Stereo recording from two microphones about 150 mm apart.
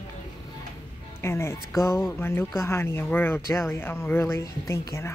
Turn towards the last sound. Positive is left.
turn(degrees=20)  # may be behind; listen again after turning